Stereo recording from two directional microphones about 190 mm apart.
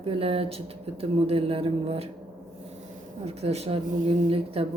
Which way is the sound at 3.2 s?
35° right (ahead or behind).